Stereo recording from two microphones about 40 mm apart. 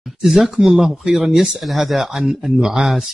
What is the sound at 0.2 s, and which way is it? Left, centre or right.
A man's voice, centre.